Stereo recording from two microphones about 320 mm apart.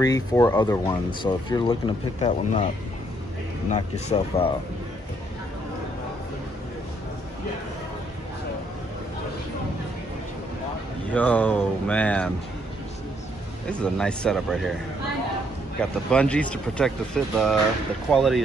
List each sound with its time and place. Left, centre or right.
0.0 s speech: centre
3.7 s speech: centre
11.1 s speech: centre
13.7 s speech: centre
15.8 s speech: centre